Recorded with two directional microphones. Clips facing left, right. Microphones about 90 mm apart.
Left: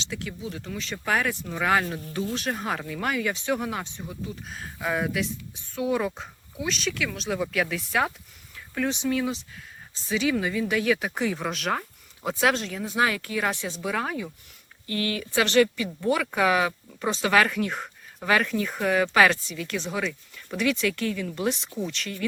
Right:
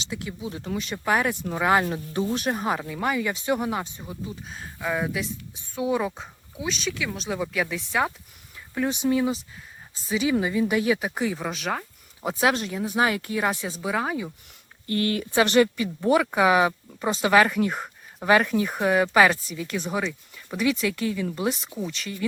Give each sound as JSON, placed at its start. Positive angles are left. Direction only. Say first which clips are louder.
{"t": 0.0, "sound": "speech", "louder": "right 1 dB", "side_deg": -15}
{"t": 4.4, "sound": "speech", "louder": "even", "side_deg": 0}
{"t": 12.2, "sound": "speech", "louder": "right 1 dB", "side_deg": -15}
{"t": 13.0, "sound": "speech", "louder": "right 1 dB", "side_deg": -25}
{"t": 13.4, "sound": "speech", "louder": "right 1 dB", "side_deg": -5}
{"t": 14.8, "sound": "speech", "louder": "right 4 dB", "side_deg": -35}
{"t": 15.3, "sound": "speech", "louder": "right 1 dB", "side_deg": -20}